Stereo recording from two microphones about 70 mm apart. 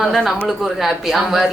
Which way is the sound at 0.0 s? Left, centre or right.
Centre.